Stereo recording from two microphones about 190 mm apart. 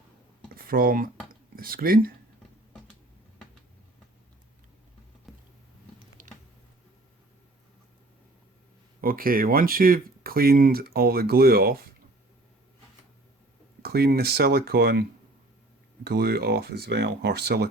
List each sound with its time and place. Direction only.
0.5 s speech: 50° right (ahead or behind)
5.3 s a sound: centre (ahead or behind)
6.2 s squish: 45° right (ahead or behind)
9.0 s speech: 50° right (ahead or behind)
13.8 s speech: 55° right (ahead or behind)
16.0 s speech: 55° right (ahead or behind)